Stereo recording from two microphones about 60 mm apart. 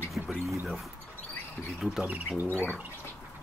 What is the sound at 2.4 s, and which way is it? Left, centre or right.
Speech, left.